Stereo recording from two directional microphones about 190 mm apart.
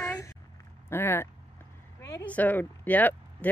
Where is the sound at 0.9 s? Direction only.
10° left (ahead or behind).